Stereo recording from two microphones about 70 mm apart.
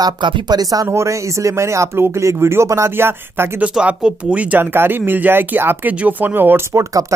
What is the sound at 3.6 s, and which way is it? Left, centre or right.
Speech, centre.